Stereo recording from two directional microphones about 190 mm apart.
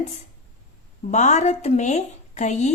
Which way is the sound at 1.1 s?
40° left (ahead or behind).